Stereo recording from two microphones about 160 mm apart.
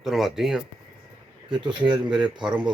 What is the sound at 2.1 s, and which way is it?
Speech, 5° right (ahead or behind).